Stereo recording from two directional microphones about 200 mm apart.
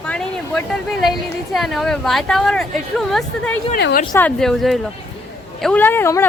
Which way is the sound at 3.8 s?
60° left (ahead or behind).